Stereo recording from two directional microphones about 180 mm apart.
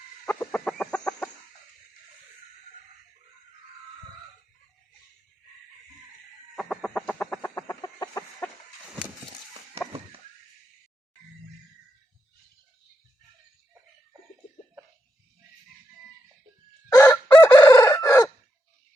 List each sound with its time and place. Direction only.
0.3 s chicken: 10° left (ahead or behind)
6.6 s chicken: centre (ahead or behind); by 8.2 s 20° left (ahead or behind)
16.9 s chicken: 20° left (ahead or behind)